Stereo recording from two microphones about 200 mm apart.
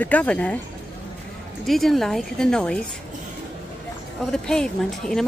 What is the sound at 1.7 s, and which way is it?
A woman's voice, centre (ahead or behind).